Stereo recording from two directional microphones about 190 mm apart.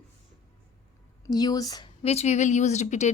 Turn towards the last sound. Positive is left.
turn(degrees=40)  # may be behind; listen again after turning